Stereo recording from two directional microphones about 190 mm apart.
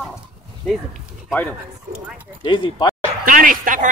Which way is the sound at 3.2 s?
45° right (ahead or behind).